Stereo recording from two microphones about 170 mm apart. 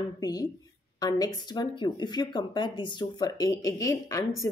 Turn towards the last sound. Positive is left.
turn(degrees=20)  # may be behind; listen again after turning